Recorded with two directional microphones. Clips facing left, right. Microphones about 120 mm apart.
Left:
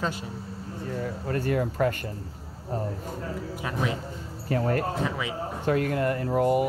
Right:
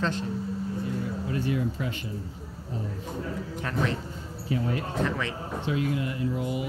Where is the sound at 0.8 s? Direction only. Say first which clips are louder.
Even; 55° left (ahead or behind).